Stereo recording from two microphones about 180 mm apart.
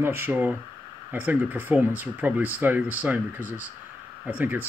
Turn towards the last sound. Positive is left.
turn(degrees=-10)  # may be behind; listen again after turning